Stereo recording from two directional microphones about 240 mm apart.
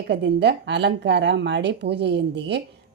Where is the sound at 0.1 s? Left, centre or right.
Right.